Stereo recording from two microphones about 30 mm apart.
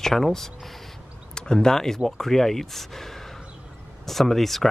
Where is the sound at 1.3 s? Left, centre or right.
Left.